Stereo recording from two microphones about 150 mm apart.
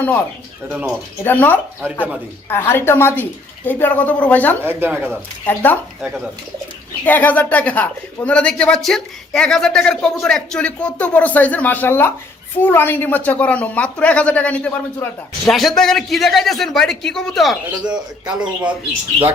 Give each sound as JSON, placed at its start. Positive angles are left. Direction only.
{"t": 0.0, "sound": "speech", "side_deg": 10}
{"t": 0.7, "sound": "speech", "side_deg": -10}
{"t": 1.2, "sound": "speech", "side_deg": 10}
{"t": 4.6, "sound": "speech", "side_deg": -15}
{"t": 5.1, "sound": "speech", "side_deg": 10}
{"t": 7.0, "sound": "speech", "side_deg": 10}
{"t": 15.4, "sound": "a man's voice", "side_deg": 0}